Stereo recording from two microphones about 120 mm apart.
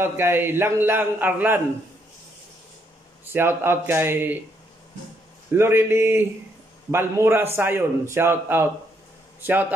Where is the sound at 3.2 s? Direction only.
20° right (ahead or behind).